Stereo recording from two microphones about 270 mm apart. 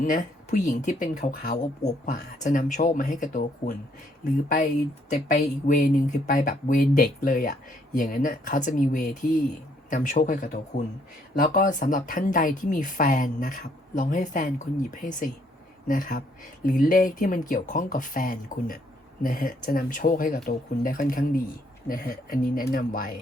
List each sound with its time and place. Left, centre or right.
0.0 s speech: left